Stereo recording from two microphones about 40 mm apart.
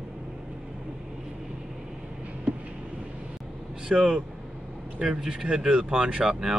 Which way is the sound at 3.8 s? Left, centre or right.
Right.